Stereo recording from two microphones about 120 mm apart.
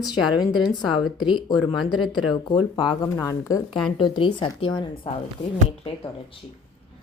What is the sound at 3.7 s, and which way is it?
A woman's voice, 40° left (ahead or behind).